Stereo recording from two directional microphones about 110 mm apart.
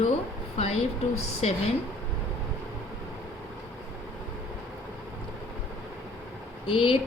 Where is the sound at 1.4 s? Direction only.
75° left (ahead or behind).